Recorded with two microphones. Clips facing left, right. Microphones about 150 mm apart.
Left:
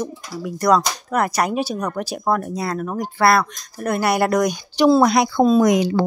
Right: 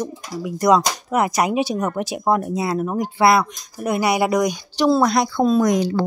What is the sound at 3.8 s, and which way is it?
Speech, centre (ahead or behind).